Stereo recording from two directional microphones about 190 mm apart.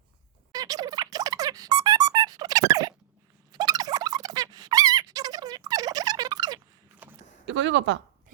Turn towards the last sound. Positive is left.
turn(degrees=-75)  # may be behind; listen again after turning